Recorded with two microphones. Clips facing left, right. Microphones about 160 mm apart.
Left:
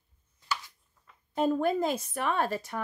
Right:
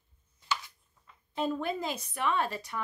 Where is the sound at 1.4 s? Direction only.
45° left (ahead or behind).